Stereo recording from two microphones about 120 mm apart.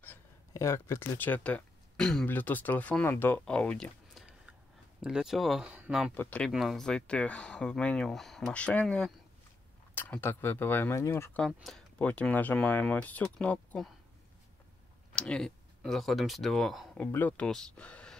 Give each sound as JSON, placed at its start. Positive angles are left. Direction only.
{"t": 0.5, "sound": "speech", "side_deg": 25}
{"t": 5.0, "sound": "speech", "side_deg": -5}
{"t": 6.1, "sound": "speech", "side_deg": 10}
{"t": 6.5, "sound": "speech", "side_deg": 0}
{"t": 11.3, "sound": "speech", "side_deg": 5}
{"t": 15.1, "sound": "speech", "side_deg": 5}
{"t": 17.0, "sound": "speech", "side_deg": 15}